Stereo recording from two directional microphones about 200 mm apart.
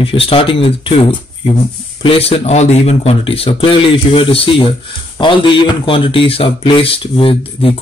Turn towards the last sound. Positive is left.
turn(degrees=25)  # may be behind; listen again after turning